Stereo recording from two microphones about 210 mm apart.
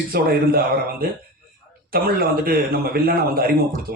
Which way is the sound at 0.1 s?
45° right (ahead or behind).